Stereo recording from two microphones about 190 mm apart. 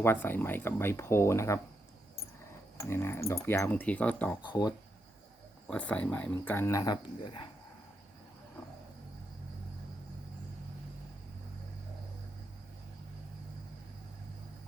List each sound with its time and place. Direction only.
0.0 s speech: 10° left (ahead or behind)
2.8 s speech: 15° left (ahead or behind)
4.4 s speech: 20° left (ahead or behind)
5.6 s speech: 5° left (ahead or behind); by 7.4 s 25° left (ahead or behind)